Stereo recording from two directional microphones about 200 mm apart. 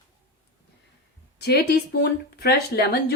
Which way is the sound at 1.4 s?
55° left (ahead or behind).